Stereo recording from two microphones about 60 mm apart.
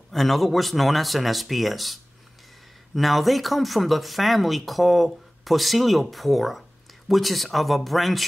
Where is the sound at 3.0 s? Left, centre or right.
Centre.